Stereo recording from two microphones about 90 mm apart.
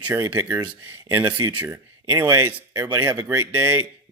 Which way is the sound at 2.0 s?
35° right (ahead or behind).